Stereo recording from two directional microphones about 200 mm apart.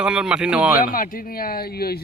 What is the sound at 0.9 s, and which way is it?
Speech, 45° left (ahead or behind).